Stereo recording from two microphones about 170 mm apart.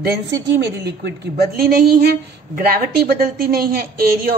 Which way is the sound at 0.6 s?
90° right.